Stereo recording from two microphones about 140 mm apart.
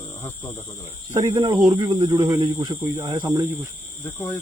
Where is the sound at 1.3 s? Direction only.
30° right (ahead or behind).